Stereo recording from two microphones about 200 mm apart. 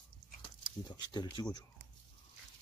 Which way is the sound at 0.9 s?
20° left (ahead or behind).